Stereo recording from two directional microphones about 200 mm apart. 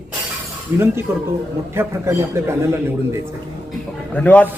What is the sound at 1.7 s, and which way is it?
Speech, 10° right (ahead or behind).